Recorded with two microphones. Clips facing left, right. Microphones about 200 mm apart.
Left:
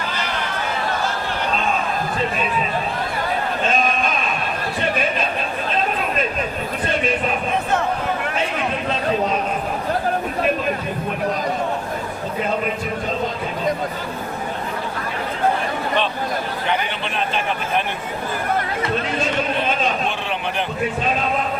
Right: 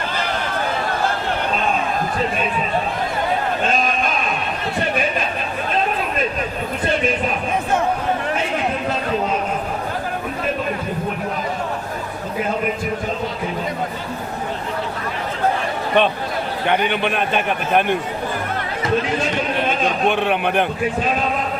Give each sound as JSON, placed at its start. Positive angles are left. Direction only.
{"t": 16.0, "sound": "a man's voice", "side_deg": -60}
{"t": 20.1, "sound": "a man's voice", "side_deg": -60}